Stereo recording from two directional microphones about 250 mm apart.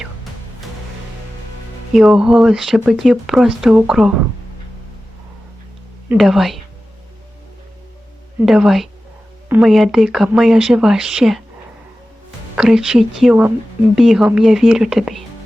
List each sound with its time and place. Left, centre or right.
1.9 s speech: centre
6.1 s speech: centre
8.4 s speech: centre
12.5 s speech: centre